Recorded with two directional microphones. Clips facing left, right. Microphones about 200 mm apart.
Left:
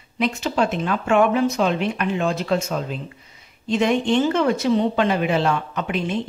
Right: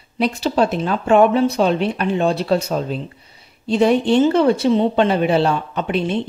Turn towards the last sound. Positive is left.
turn(degrees=-30)  # may be behind; listen again after turning